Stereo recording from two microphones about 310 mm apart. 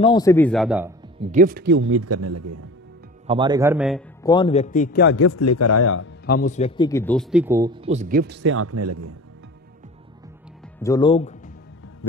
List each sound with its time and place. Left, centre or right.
0.0 s a man's voice: centre
1.2 s speech: right
3.3 s a man's voice: centre
4.2 s a man's voice: centre
5.0 s speech: left
6.2 s a man's voice: left; by 9.1 s right
10.8 s speech: centre
12.0 s music: left